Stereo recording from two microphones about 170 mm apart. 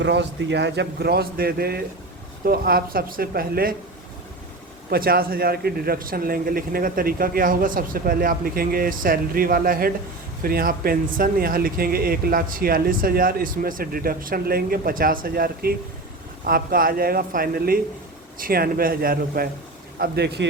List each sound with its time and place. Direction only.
0.0 s a man's voice: 90° right; by 3.8 s 60° right (ahead or behind)
4.9 s speech: 60° right (ahead or behind)
20.0 s a man's voice: 75° right (ahead or behind)